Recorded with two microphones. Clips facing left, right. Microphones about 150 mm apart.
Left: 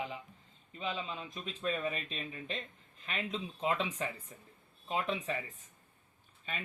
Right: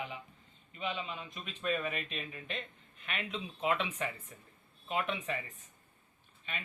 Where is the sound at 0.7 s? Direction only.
35° left (ahead or behind).